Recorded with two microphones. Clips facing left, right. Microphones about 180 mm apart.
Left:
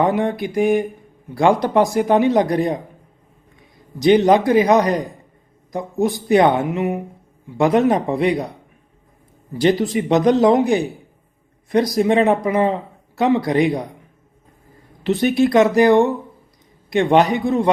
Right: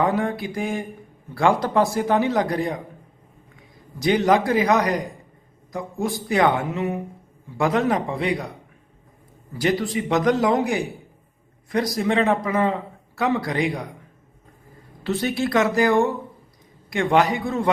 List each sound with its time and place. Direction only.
0.0 s speech: 20° left (ahead or behind)
4.0 s speech: 20° left (ahead or behind)
9.6 s speech: 25° left (ahead or behind)
15.0 s speech: 20° left (ahead or behind)